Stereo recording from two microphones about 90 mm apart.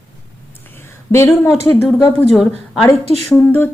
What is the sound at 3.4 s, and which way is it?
Speech, 25° left (ahead or behind).